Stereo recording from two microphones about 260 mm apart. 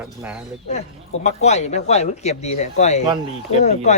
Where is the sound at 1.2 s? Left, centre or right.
Left.